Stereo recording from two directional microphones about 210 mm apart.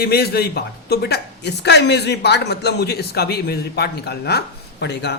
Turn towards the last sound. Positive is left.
turn(degrees=55)  # may be behind; listen again after turning